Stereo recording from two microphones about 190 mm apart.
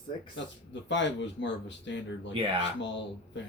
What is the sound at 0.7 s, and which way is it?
Speech, 70° left (ahead or behind).